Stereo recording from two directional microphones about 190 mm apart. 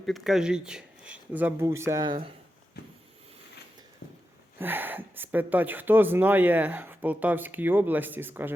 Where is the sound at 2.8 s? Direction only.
55° left (ahead or behind).